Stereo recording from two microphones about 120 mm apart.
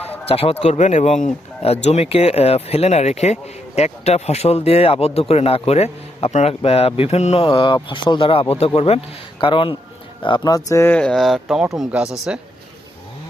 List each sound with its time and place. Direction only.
0.3 s speech: 55° left (ahead or behind)
0.6 s speech: 65° left (ahead or behind)
7.4 s speech: 45° left (ahead or behind); by 10.8 s 30° left (ahead or behind)
10.8 s speech: 10° left (ahead or behind)